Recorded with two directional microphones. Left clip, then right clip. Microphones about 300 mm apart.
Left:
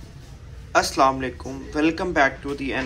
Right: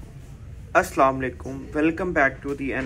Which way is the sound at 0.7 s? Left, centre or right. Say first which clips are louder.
Left 1 dB; centre.